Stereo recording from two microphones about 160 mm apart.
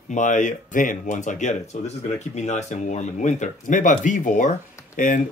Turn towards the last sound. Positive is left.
turn(degrees=55)  # may be behind; listen again after turning